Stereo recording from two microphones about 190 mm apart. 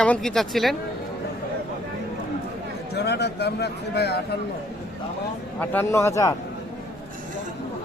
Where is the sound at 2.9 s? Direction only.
60° left (ahead or behind).